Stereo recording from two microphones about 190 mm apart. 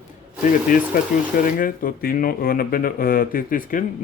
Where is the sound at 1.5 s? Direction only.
45° left (ahead or behind).